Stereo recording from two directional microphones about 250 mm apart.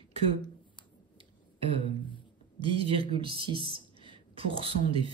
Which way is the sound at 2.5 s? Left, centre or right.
Right.